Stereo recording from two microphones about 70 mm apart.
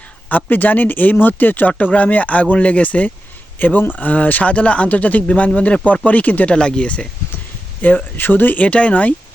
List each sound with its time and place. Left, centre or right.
0.3 s speech: left